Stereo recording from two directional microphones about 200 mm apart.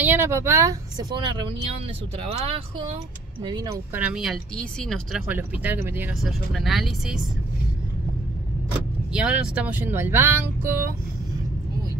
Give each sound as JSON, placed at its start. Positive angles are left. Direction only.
{"t": 0.0, "sound": "speech", "side_deg": -10}
{"t": 3.4, "sound": "speech", "side_deg": -15}
{"t": 9.1, "sound": "speech", "side_deg": -5}